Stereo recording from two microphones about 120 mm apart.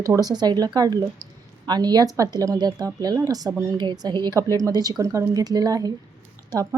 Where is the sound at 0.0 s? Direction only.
30° right (ahead or behind).